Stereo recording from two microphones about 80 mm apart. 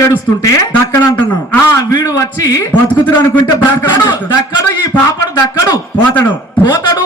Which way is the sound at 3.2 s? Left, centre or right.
Left.